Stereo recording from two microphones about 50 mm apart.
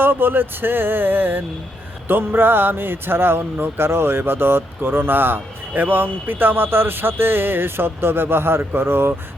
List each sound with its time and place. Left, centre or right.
0.0 s speech: right